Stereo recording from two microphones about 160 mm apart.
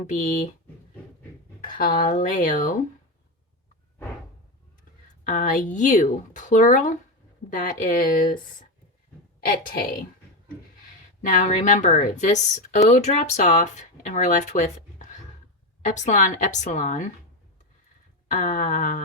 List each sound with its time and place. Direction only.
0.1 s speech: 50° left (ahead or behind)
2.0 s speech: 55° left (ahead or behind)
5.2 s speech: 55° left (ahead or behind)
11.2 s speech: 50° left (ahead or behind)
18.3 s speech: 55° left (ahead or behind)